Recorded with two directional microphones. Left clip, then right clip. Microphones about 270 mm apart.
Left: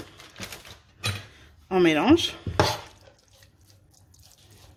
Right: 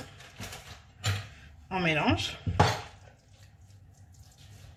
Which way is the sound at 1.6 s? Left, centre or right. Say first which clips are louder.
Left 8 dB; left.